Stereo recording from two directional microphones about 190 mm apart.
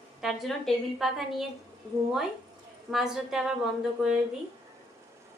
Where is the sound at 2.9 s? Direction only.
Centre (ahead or behind).